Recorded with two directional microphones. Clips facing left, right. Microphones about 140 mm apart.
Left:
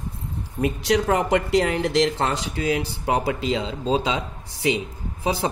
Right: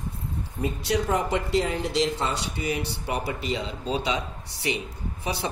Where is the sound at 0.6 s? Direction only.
90° left.